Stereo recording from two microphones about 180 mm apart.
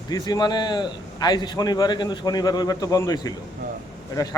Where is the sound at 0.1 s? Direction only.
20° left (ahead or behind).